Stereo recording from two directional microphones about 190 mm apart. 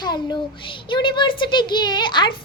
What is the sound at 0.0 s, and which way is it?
A child's voice, 20° left (ahead or behind).